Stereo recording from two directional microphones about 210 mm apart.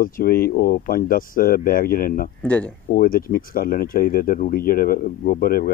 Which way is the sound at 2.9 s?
40° left (ahead or behind).